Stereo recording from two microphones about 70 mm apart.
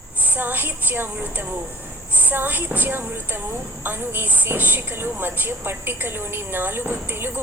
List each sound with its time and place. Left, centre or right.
0.3 s a woman's voice: right